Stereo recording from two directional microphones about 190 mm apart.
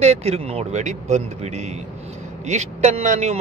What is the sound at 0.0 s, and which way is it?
A man's voice, 35° right (ahead or behind).